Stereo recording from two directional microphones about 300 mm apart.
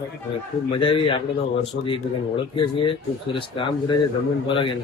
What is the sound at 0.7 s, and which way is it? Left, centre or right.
Speech, centre.